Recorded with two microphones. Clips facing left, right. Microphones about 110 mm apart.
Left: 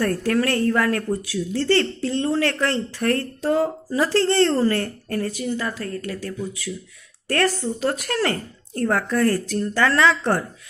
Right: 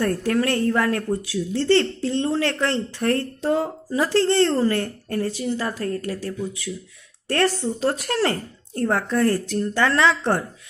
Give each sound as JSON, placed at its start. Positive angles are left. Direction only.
{"t": 0.0, "sound": "speech", "side_deg": -20}